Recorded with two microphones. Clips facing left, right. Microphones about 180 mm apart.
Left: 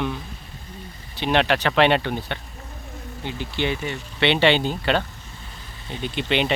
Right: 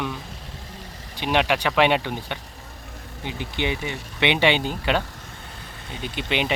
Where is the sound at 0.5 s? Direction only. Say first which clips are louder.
Even; 90° right.